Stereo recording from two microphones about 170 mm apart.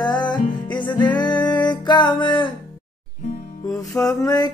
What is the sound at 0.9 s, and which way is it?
Music, 25° left (ahead or behind).